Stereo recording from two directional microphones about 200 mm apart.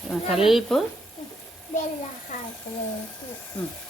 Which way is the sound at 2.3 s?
40° left (ahead or behind).